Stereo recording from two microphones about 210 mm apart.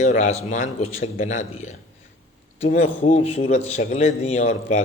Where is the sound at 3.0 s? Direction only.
40° left (ahead or behind).